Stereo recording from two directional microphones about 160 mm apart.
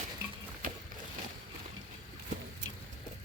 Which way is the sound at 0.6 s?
60° right (ahead or behind).